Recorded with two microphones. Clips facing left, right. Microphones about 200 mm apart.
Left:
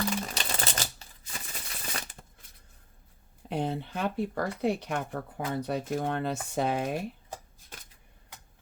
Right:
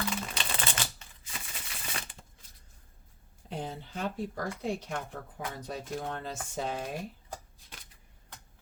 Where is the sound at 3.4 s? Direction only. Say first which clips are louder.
Left 7 dB; 65° left (ahead or behind).